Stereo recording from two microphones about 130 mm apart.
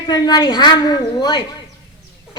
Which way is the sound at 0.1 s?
30° left (ahead or behind).